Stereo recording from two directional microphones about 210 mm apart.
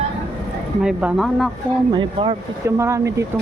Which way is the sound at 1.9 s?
25° right (ahead or behind).